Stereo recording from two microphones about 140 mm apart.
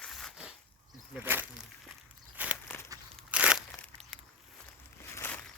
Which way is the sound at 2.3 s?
10° right (ahead or behind).